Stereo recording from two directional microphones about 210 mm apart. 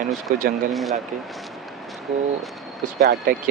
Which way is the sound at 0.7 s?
Centre (ahead or behind).